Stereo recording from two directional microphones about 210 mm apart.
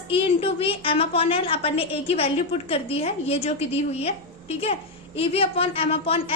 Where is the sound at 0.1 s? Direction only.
25° left (ahead or behind).